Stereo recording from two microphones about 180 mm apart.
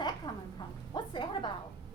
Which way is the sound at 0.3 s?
25° left (ahead or behind).